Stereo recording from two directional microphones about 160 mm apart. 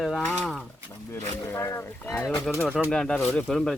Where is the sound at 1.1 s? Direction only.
15° left (ahead or behind).